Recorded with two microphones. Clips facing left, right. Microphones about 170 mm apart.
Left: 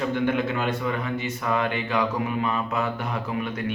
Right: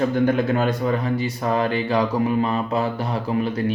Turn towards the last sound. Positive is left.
turn(degrees=-35)  # may be behind; listen again after turning